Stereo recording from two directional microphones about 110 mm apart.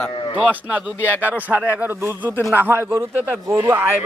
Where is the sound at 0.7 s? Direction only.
15° right (ahead or behind).